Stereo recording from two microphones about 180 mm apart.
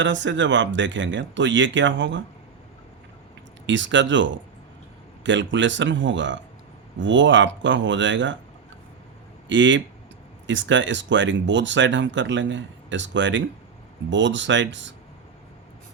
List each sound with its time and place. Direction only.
0.0 s speech: 85° right
3.7 s speech: 90° right
9.5 s speech: 90° right